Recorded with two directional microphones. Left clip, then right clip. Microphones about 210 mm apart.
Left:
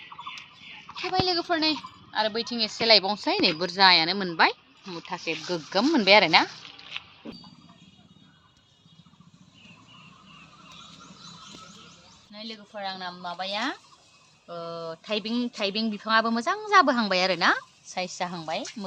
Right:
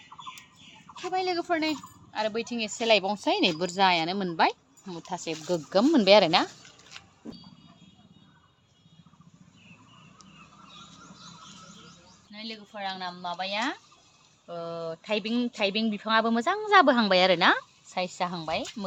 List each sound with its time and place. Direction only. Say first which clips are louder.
0.9 s speech: left 3 dB; 5° right (ahead or behind); by 6.5 s 40° right (ahead or behind)
12.3 s speech: left 1 dB; 5° right (ahead or behind); by 18.9 s 20° right (ahead or behind)